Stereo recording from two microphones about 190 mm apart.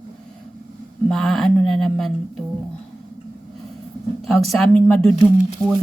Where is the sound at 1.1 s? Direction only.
Centre (ahead or behind).